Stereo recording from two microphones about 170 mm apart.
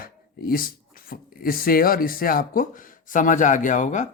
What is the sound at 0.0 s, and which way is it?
Speech, 60° left (ahead or behind).